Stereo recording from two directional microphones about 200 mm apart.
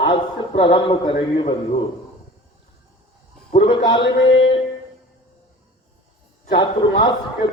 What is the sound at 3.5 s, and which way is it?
A man's voice, 25° left (ahead or behind).